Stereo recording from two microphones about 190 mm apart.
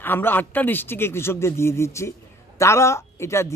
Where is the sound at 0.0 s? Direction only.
10° left (ahead or behind).